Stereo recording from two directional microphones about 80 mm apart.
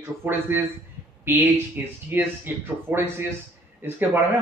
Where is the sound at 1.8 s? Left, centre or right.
Right.